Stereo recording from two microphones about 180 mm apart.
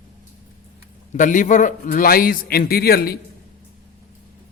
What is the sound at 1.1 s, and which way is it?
A man's voice, 45° left (ahead or behind).